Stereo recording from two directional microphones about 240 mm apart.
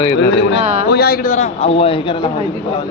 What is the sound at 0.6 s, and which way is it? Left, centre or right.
Speech, right.